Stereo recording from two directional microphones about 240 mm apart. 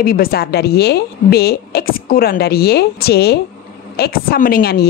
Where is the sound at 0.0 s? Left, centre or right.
Left.